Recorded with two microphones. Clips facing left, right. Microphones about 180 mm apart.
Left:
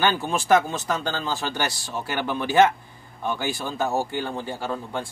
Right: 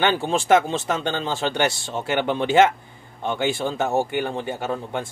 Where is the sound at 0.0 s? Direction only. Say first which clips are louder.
Right 2 dB; 25° right (ahead or behind).